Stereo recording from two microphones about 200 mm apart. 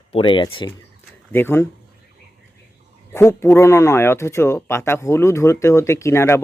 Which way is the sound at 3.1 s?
15° left (ahead or behind).